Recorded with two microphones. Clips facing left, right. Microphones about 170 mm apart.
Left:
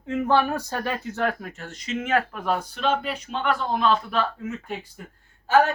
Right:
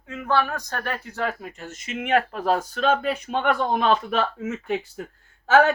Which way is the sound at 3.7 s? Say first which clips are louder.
Right 1 dB; 75° right (ahead or behind).